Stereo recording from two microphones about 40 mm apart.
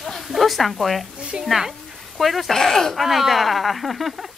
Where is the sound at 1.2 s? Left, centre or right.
Centre.